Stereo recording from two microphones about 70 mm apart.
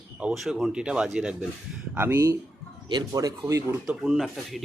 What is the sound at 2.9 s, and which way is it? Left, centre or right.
Speech, right.